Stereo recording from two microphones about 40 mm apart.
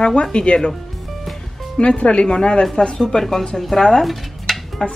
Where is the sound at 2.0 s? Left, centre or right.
Left.